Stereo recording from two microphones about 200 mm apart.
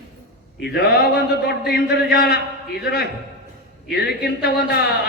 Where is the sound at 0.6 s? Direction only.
50° left (ahead or behind).